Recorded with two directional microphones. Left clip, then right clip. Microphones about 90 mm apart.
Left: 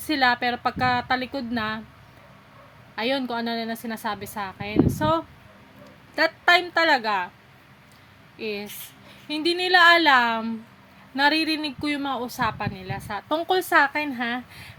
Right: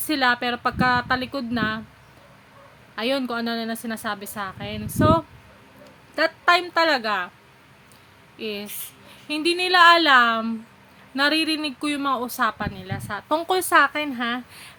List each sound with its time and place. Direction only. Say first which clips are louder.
0.0 s a woman's voice: even; 30° right (ahead or behind)
2.9 s a woman's voice: right 1 dB; 30° right (ahead or behind)
6.1 s a woman's voice: even; 25° right (ahead or behind)
8.4 s a woman's voice: even; 35° right (ahead or behind)
13.2 s speech: right 1 dB; 50° right (ahead or behind)
13.7 s a woman's voice: right 3 dB; 30° right (ahead or behind)